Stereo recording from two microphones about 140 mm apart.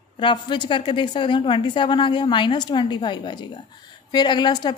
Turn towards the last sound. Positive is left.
turn(degrees=30)  # may be behind; listen again after turning